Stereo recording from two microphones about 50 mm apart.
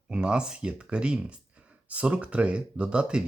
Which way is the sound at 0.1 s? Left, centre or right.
Centre.